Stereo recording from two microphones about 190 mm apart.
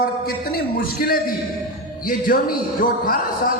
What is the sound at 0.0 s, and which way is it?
A man's voice, 50° left (ahead or behind).